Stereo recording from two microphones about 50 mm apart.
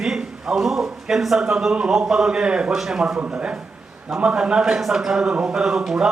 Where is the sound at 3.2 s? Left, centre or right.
Right.